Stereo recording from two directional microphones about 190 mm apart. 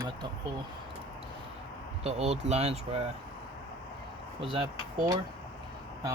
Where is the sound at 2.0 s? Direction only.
35° right (ahead or behind).